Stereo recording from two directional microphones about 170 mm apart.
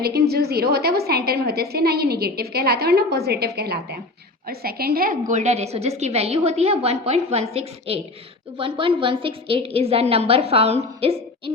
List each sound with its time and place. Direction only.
0.0 s a woman's voice: 70° right (ahead or behind)
5.3 s a woman's voice: 45° right (ahead or behind)